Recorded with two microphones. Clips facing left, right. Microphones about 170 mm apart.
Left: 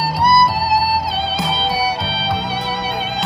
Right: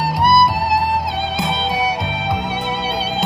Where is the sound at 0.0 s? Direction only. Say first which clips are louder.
Even; 20° right (ahead or behind).